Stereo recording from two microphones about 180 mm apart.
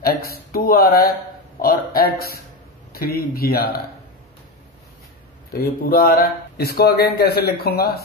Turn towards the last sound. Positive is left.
turn(degrees=60)  # may be behind; listen again after turning